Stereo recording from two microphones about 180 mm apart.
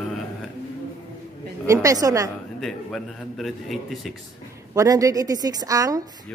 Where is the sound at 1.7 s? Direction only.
20° right (ahead or behind).